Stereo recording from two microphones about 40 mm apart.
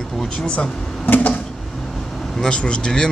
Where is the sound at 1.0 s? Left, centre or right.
Left.